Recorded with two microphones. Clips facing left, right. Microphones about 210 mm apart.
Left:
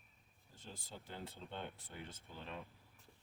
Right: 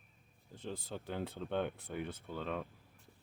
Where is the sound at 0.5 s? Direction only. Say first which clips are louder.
Right 10 dB; 60° right (ahead or behind).